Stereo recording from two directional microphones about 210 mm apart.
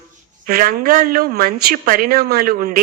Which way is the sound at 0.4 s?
45° right (ahead or behind).